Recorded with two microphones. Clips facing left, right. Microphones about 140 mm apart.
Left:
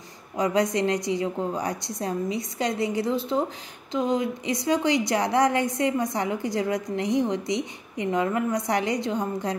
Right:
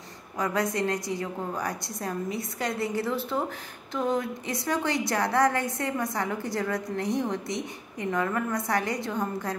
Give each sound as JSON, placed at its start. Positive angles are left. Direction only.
{"t": 0.4, "sound": "a woman's voice", "side_deg": 20}